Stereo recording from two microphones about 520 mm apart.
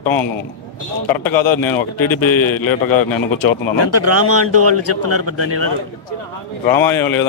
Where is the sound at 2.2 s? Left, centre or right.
Left.